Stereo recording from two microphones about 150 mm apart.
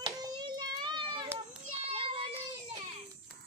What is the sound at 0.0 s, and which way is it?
Hands, 30° right (ahead or behind).